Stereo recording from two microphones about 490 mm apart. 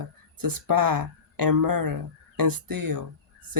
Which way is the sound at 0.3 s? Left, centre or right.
Right.